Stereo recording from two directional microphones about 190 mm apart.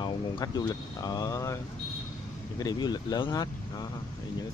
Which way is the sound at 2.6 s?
20° left (ahead or behind).